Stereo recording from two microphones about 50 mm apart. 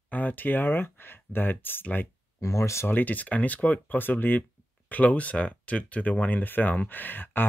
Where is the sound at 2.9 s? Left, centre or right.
Left.